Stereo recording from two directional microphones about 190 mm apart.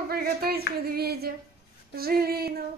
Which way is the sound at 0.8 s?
55° right (ahead or behind).